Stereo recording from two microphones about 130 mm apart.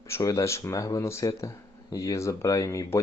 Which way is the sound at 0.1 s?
25° left (ahead or behind).